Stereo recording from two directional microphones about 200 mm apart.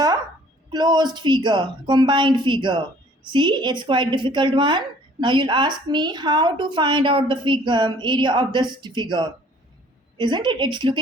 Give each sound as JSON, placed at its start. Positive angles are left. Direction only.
{"t": 0.7, "sound": "a woman's voice", "side_deg": -20}